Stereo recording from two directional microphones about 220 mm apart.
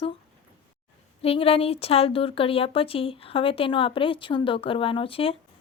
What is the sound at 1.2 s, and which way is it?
A woman's voice, 25° left (ahead or behind).